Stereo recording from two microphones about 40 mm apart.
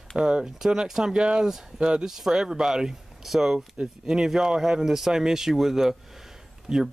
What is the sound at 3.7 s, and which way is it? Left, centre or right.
Speech, centre.